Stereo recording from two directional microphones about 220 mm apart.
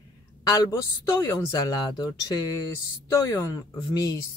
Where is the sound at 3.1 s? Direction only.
15° left (ahead or behind).